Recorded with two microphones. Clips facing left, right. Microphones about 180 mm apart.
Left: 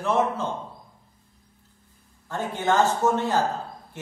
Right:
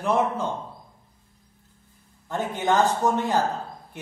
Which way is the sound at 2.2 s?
15° right (ahead or behind).